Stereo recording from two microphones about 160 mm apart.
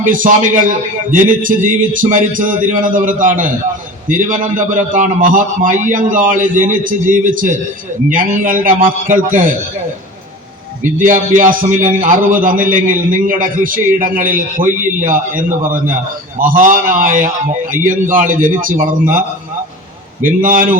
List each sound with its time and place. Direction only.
0.0 s a man's voice: 55° right (ahead or behind)
10.8 s a man's voice: 55° right (ahead or behind)
20.2 s a man's voice: 60° right (ahead or behind)